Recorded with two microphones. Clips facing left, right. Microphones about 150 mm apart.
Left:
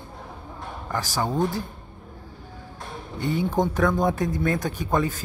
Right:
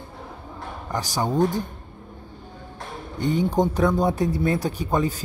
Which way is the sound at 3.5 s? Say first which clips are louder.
Even; 15° right (ahead or behind).